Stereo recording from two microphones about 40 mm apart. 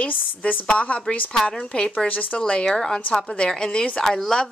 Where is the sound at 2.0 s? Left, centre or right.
Left.